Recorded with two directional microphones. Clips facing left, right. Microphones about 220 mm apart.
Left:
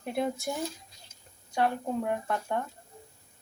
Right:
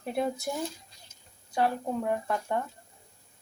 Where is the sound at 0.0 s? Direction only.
Centre (ahead or behind).